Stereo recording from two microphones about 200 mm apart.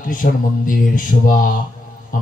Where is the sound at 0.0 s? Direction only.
40° left (ahead or behind).